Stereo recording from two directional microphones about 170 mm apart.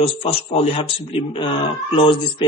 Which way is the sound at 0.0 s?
35° left (ahead or behind).